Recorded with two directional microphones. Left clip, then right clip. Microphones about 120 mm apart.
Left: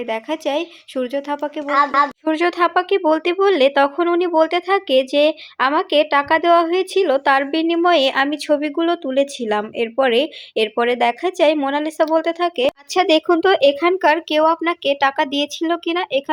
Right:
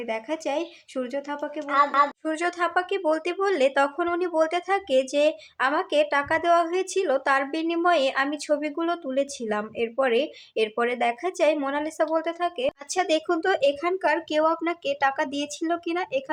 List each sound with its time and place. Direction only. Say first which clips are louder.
0.0 s speech: left 7 dB; 40° left (ahead or behind)
12.5 s speech: left 8 dB; 50° left (ahead or behind); by 16.3 s 30° left (ahead or behind)